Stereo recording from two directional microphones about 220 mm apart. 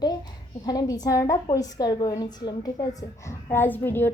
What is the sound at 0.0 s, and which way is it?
A child's voice, 20° left (ahead or behind).